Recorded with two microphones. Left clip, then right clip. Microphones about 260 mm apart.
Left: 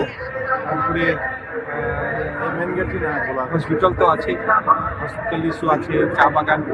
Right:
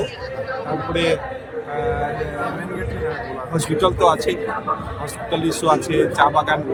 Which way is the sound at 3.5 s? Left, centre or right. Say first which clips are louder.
Even; centre.